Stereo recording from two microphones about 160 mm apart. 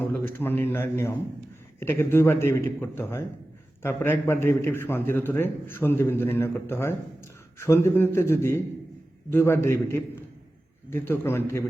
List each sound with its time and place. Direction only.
0.0 s a man's voice: 10° left (ahead or behind)